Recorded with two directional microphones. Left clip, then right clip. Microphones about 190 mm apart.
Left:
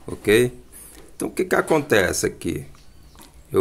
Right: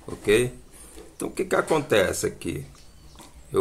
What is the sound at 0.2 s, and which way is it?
Speech, 35° left (ahead or behind).